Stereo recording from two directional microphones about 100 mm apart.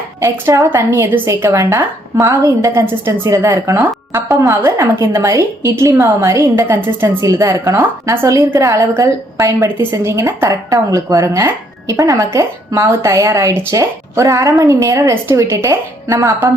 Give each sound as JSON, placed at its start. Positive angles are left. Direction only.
{"t": 0.2, "sound": "a woman's voice", "side_deg": -25}